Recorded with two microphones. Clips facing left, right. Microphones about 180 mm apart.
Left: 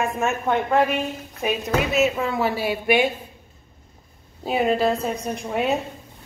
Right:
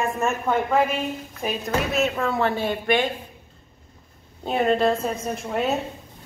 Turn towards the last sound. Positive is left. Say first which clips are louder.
# left 1 dB
turn(degrees=0)  # may be behind; listen again after turning